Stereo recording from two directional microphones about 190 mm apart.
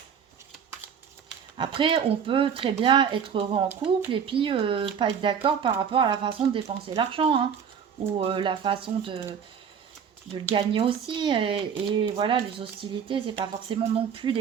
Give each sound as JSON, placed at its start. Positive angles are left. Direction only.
{"t": 1.5, "sound": "speech", "side_deg": -25}
{"t": 10.3, "sound": "speech", "side_deg": -25}